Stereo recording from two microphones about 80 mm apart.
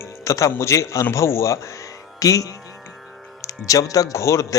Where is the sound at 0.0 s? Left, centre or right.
Left.